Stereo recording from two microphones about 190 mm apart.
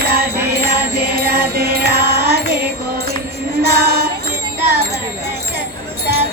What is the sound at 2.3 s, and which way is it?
Music, 55° right (ahead or behind).